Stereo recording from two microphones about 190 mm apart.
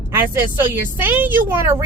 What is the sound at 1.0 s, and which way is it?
Speech, 10° right (ahead or behind).